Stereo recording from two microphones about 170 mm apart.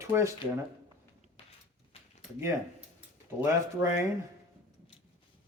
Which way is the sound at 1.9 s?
35° left (ahead or behind).